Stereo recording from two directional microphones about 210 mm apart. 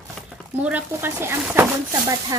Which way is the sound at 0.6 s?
10° right (ahead or behind).